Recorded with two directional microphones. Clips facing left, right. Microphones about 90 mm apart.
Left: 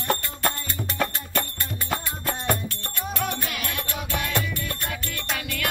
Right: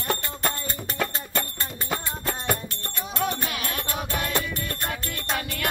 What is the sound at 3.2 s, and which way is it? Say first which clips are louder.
Music: right 3 dB; 30° right (ahead or behind).